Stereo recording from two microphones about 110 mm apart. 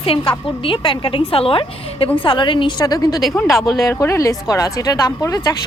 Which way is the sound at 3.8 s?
25° left (ahead or behind).